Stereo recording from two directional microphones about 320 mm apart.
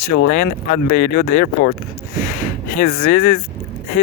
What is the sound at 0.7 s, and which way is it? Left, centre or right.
Speech, left.